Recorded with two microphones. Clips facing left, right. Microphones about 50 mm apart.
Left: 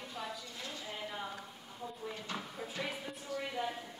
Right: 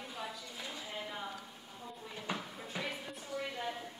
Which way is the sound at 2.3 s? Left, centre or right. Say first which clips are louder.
Right 4 dB; centre.